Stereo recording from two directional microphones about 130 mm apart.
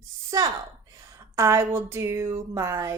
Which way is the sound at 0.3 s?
25° right (ahead or behind).